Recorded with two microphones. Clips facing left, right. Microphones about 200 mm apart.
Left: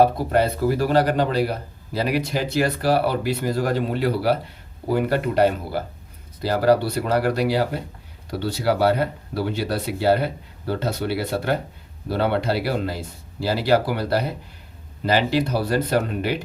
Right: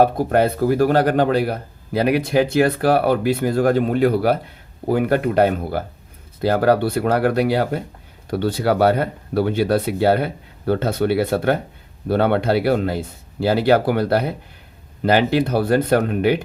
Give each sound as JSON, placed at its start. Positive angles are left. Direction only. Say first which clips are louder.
{"t": 0.0, "sound": "speech", "louder": "right 2 dB", "side_deg": -50}